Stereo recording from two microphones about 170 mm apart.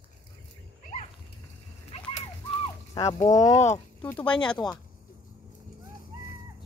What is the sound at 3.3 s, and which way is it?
Speech, 20° left (ahead or behind).